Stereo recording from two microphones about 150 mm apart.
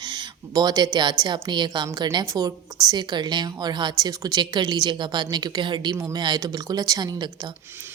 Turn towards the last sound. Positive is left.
turn(degrees=-30)  # may be behind; listen again after turning